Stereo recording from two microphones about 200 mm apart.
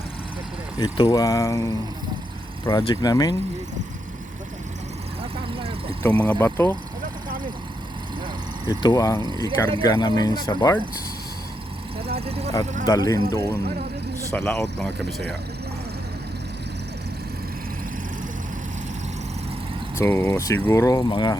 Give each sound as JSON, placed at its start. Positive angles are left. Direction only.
{"t": 0.8, "sound": "speech", "side_deg": 20}
{"t": 2.6, "sound": "speech", "side_deg": 20}
{"t": 5.5, "sound": "vehicle", "side_deg": -30}
{"t": 6.0, "sound": "speech", "side_deg": 10}
{"t": 8.6, "sound": "speech", "side_deg": 20}
{"t": 12.2, "sound": "speech", "side_deg": -30}
{"t": 12.8, "sound": "speech", "side_deg": 20}
{"t": 14.3, "sound": "speech", "side_deg": 5}
{"t": 20.0, "sound": "speech", "side_deg": 10}